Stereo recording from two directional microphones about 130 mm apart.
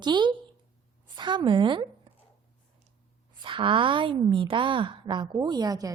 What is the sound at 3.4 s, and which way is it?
A woman's voice, 40° right (ahead or behind).